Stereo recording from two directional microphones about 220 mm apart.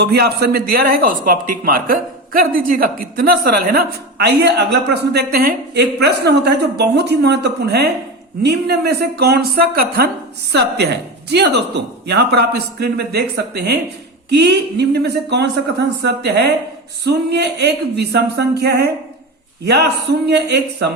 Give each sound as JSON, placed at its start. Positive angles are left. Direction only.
{"t": 0.0, "sound": "speech", "side_deg": -45}